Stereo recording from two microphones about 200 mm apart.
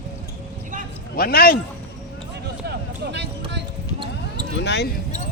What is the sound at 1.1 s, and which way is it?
Speech, 50° left (ahead or behind).